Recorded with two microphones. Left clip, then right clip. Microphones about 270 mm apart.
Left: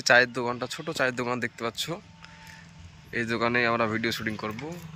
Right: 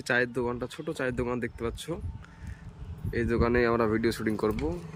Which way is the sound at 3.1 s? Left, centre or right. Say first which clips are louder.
Even; centre.